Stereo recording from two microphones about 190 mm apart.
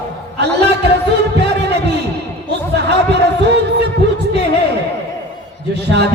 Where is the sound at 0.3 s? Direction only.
60° right (ahead or behind).